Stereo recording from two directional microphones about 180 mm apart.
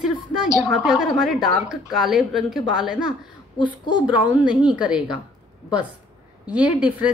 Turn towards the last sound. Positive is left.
turn(degrees=-5)  # may be behind; listen again after turning